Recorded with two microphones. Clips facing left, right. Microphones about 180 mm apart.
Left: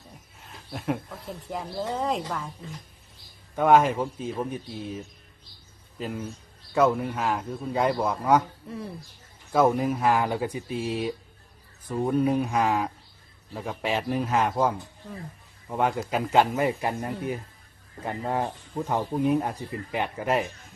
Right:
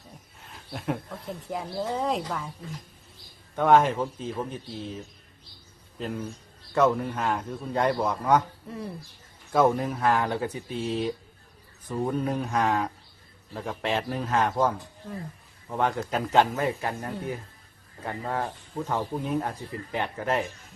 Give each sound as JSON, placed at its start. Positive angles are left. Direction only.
{"t": 0.3, "sound": "speech", "side_deg": 0}
{"t": 3.5, "sound": "speech", "side_deg": 5}
{"t": 6.0, "sound": "speech", "side_deg": 0}